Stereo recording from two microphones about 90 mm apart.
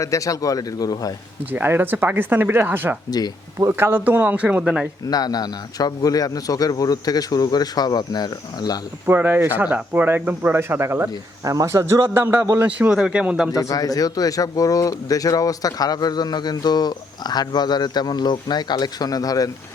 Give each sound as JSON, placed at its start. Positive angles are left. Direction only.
{"t": 0.0, "sound": "speech", "side_deg": 35}
{"t": 1.5, "sound": "speech", "side_deg": -20}
{"t": 3.1, "sound": "speech", "side_deg": 45}
{"t": 3.6, "sound": "speech", "side_deg": -25}
{"t": 5.0, "sound": "speech", "side_deg": 45}
{"t": 9.0, "sound": "a man's voice", "side_deg": -25}
{"t": 12.9, "sound": "speech", "side_deg": -5}
{"t": 13.5, "sound": "speech", "side_deg": 40}